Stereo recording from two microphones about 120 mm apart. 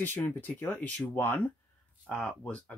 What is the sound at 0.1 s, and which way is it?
Speech, 15° left (ahead or behind).